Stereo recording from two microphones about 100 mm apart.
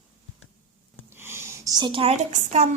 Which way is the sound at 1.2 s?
25° right (ahead or behind).